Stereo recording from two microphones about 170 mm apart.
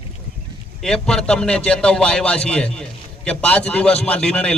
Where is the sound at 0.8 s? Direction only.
5° left (ahead or behind).